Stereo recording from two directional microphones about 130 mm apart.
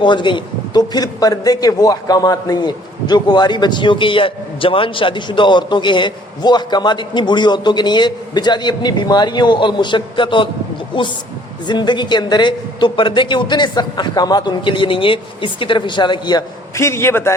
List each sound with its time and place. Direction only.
0.0 s a man's voice: 35° left (ahead or behind)
16.7 s a man's voice: 20° left (ahead or behind)